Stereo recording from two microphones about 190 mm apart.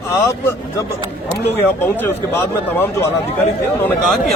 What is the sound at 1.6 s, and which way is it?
A man's voice, 10° left (ahead or behind).